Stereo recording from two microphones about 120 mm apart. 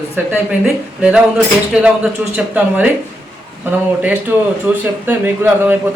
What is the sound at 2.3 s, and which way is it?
Speech, 15° right (ahead or behind).